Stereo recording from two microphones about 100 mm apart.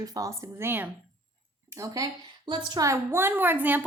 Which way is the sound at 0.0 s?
35° right (ahead or behind).